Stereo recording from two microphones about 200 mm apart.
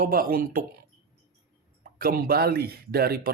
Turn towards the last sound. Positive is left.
turn(degrees=-50)  # may be behind; listen again after turning